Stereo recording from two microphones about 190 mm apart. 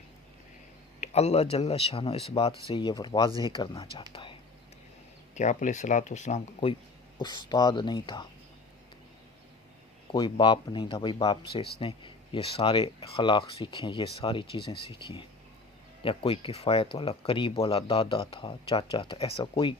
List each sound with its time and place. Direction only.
1.0 s speech: 35° left (ahead or behind)
5.3 s speech: 40° left (ahead or behind)
7.2 s speech: 20° left (ahead or behind)
10.1 s speech: 25° left (ahead or behind)